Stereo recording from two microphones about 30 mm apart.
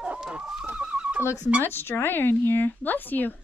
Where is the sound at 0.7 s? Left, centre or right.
Right.